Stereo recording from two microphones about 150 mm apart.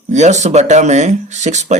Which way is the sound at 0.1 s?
50° right (ahead or behind).